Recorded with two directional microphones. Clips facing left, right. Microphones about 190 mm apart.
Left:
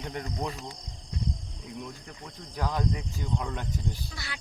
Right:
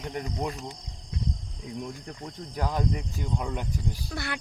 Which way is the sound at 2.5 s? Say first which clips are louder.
Right 1 dB; 15° right (ahead or behind).